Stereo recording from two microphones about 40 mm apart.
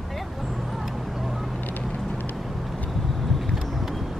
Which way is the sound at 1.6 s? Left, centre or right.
Left.